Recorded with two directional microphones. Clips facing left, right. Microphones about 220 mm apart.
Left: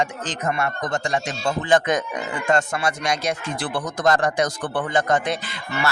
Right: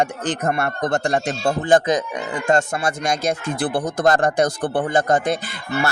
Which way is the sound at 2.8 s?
45° right (ahead or behind).